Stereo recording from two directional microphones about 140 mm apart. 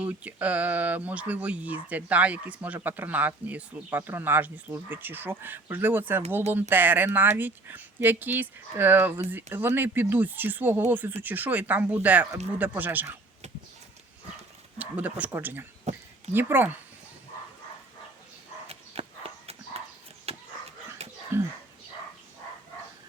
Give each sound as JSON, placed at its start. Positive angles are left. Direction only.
{"t": 0.0, "sound": "speech", "side_deg": -10}
{"t": 14.8, "sound": "speech", "side_deg": -10}
{"t": 15.8, "sound": "a sound", "side_deg": -50}
{"t": 16.3, "sound": "speech", "side_deg": -15}
{"t": 19.0, "sound": "horse", "side_deg": -45}
{"t": 20.3, "sound": "dog", "side_deg": -45}
{"t": 21.3, "sound": "speech", "side_deg": -15}